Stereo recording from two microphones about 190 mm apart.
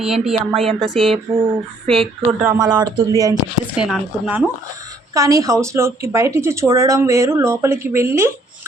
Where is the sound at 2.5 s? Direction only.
20° right (ahead or behind).